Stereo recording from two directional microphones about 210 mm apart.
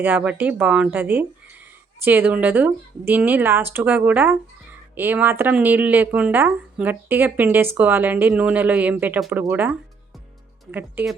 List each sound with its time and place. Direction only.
0.0 s a woman's voice: 10° right (ahead or behind)